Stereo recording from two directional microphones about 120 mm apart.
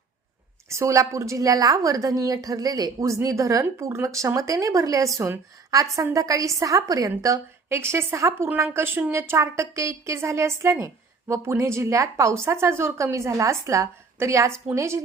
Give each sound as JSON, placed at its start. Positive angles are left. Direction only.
{"t": 0.7, "sound": "a woman's voice", "side_deg": -25}